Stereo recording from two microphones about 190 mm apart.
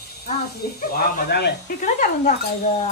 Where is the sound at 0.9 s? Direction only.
55° left (ahead or behind).